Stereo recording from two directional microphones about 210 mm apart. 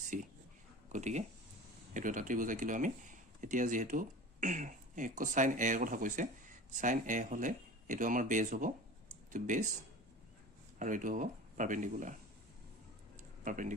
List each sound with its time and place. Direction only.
0.0 s a sound: 40° right (ahead or behind)
0.9 s speech: 35° right (ahead or behind)
10.8 s speech: 40° right (ahead or behind)
13.4 s speech: 35° right (ahead or behind)